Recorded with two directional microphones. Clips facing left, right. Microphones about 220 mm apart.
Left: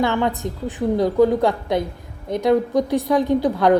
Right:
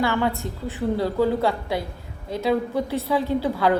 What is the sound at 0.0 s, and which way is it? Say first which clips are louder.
A woman's voice: left 3 dB; 20° left (ahead or behind).